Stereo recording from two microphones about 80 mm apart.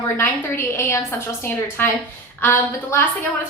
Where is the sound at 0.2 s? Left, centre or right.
Left.